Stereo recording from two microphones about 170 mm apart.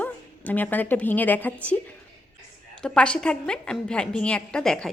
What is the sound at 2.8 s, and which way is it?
A woman's voice, 5° left (ahead or behind).